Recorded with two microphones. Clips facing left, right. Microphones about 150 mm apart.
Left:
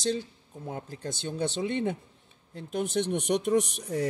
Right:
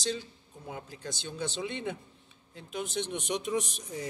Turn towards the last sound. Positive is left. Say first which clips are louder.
# left 7 dB
turn(degrees=65)  # may be behind; listen again after turning